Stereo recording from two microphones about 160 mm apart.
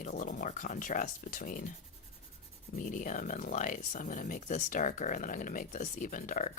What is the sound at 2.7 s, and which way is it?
Speech, 55° left (ahead or behind).